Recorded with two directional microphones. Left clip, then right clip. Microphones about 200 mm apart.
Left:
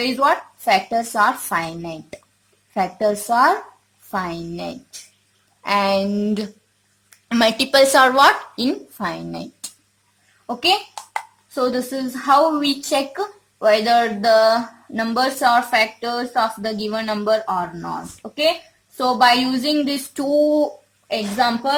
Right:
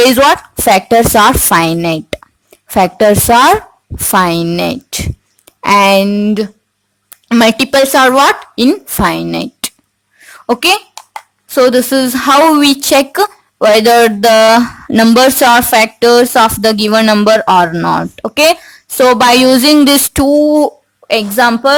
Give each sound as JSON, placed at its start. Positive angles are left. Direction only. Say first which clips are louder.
{"t": 0.3, "sound": "speech", "louder": "right 9 dB", "side_deg": -45}
{"t": 10.4, "sound": "speech", "louder": "right 8 dB", "side_deg": -50}
{"t": 20.1, "sound": "speech", "louder": "right 5 dB", "side_deg": -30}
{"t": 21.1, "sound": "speech", "louder": "right 10 dB", "side_deg": -50}